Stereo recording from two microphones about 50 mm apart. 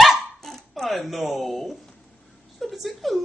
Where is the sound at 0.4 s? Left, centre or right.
Centre.